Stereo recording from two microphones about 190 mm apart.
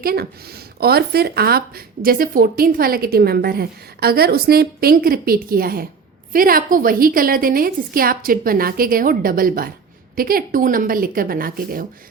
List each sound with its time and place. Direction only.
0.0 s speech: 55° right (ahead or behind)